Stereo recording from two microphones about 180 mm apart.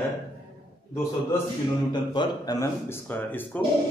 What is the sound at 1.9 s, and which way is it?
A man's voice, 25° left (ahead or behind).